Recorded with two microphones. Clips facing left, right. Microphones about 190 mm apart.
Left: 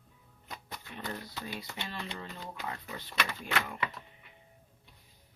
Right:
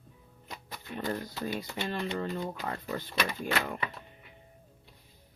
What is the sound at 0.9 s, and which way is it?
Speech, 45° right (ahead or behind).